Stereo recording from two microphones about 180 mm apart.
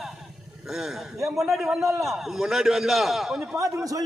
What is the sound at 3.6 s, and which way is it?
Speech, 20° right (ahead or behind).